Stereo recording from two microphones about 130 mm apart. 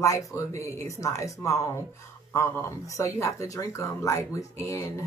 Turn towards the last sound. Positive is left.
turn(degrees=20)  # may be behind; listen again after turning